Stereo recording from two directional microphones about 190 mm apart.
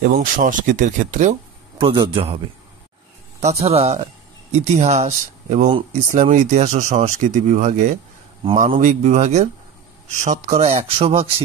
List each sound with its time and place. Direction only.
0.0 s speech: 45° right (ahead or behind)
1.8 s a man's voice: 25° right (ahead or behind)
3.3 s speech: 35° right (ahead or behind)